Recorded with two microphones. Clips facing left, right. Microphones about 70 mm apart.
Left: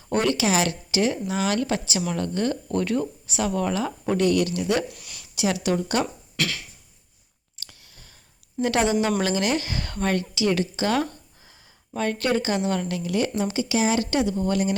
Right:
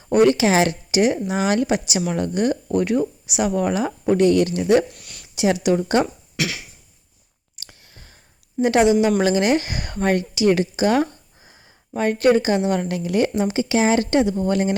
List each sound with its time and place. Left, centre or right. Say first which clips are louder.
0.1 s speech: right 7 dB; right
4.9 s speech: even; centre
5.3 s speech: right 5 dB; right
6.3 s a sound: right 1 dB; centre
7.6 s a sound: right 2 dB; right
8.6 s speech: right 6 dB; right